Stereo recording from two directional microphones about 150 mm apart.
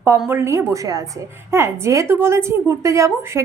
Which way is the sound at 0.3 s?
15° right (ahead or behind).